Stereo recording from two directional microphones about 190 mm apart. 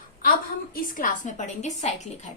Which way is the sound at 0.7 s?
45° left (ahead or behind).